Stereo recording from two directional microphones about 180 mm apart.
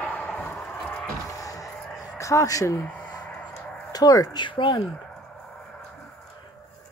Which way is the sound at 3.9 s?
20° left (ahead or behind).